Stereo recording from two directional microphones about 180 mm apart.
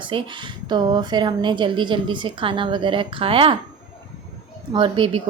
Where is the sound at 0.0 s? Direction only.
25° right (ahead or behind).